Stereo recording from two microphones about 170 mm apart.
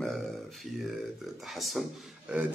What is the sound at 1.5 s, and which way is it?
Speech, centre (ahead or behind).